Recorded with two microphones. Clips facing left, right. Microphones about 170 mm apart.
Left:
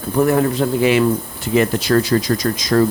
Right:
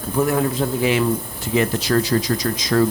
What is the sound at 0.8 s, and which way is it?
Speech, 70° left (ahead or behind).